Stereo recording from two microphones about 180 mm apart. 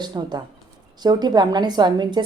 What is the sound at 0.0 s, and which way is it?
A woman's voice, 25° right (ahead or behind).